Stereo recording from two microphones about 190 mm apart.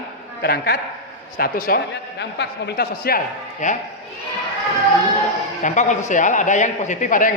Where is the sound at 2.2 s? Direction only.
65° left (ahead or behind); by 3.7 s 45° left (ahead or behind).